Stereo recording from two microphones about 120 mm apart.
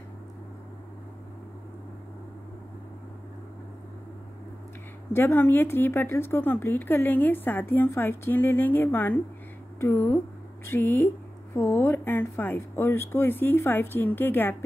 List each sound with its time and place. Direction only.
5.1 s speech: 20° left (ahead or behind)